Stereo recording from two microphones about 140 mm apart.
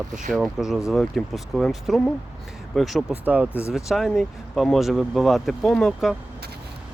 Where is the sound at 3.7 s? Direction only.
Centre (ahead or behind).